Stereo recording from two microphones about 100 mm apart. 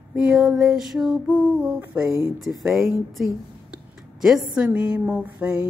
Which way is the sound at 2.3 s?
Centre (ahead or behind).